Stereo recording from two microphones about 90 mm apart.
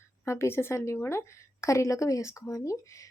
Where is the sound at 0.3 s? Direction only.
30° left (ahead or behind).